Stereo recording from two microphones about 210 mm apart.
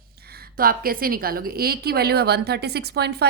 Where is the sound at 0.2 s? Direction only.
50° right (ahead or behind).